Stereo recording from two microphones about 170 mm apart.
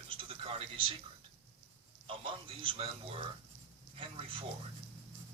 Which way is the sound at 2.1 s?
30° right (ahead or behind).